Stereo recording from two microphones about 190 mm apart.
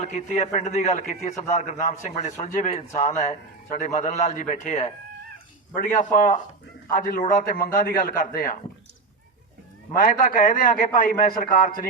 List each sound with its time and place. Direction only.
0.0 s a man's voice: 35° left (ahead or behind)
9.9 s a man's voice: 45° left (ahead or behind)